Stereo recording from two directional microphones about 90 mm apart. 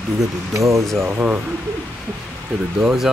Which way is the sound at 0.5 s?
35° right (ahead or behind).